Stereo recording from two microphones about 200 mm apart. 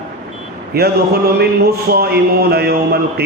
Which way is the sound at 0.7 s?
50° right (ahead or behind).